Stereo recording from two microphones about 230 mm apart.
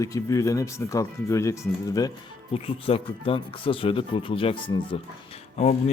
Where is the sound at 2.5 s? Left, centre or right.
Left.